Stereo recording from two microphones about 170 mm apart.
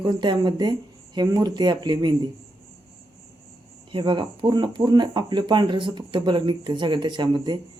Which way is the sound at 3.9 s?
30° right (ahead or behind).